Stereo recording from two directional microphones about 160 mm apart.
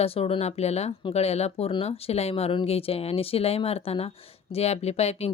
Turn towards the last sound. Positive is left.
turn(degrees=40)  # may be behind; listen again after turning